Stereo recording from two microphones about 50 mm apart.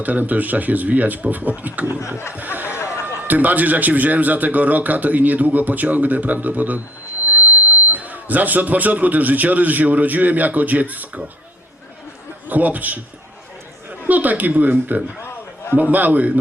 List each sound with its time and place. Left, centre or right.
0.0 s a man's voice: right
2.0 s a sound: left
2.3 s speech: right
2.7 s a sound: left
3.2 s a man's voice: right
7.9 s a man's voice: right
12.5 s a man's voice: right
14.1 s a man's voice: right